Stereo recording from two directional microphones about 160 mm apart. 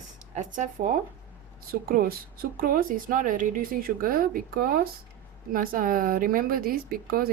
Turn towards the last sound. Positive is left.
turn(degrees=-70)  # may be behind; listen again after turning